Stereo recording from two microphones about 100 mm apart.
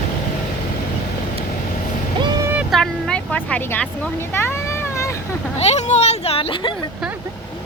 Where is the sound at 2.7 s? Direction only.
Centre (ahead or behind); by 3.8 s 20° left (ahead or behind).